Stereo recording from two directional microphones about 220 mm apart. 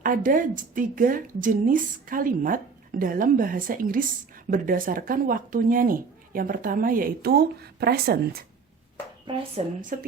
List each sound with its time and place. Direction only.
0.0 s a woman's voice: 40° right (ahead or behind)
9.3 s speech: 20° right (ahead or behind)
9.8 s a woman's voice: 40° right (ahead or behind)